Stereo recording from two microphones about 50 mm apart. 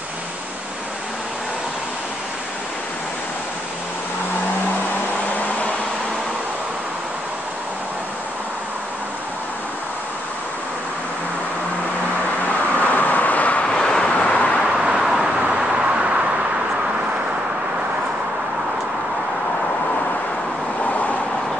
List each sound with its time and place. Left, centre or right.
12.4 s vehicle: left
13.7 s vehicle: centre
14.6 s vehicle: right
20.8 s vehicle: left